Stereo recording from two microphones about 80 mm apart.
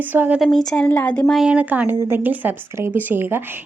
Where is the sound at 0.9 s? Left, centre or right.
Left.